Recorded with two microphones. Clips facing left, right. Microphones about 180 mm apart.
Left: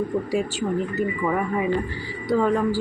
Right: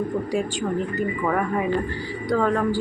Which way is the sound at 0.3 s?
5° left (ahead or behind).